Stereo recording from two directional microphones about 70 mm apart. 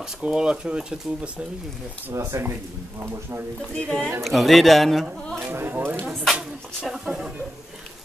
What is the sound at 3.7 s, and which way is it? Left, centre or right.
Speech, centre.